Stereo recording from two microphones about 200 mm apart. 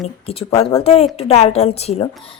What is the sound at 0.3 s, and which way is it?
A woman's voice, 30° left (ahead or behind).